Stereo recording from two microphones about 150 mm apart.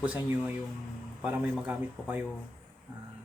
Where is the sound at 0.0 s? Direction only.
10° right (ahead or behind).